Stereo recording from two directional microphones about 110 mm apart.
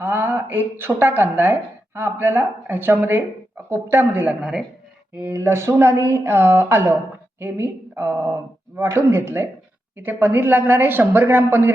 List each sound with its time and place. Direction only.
0.0 s speech: 20° right (ahead or behind)
5.1 s speech: 20° right (ahead or behind)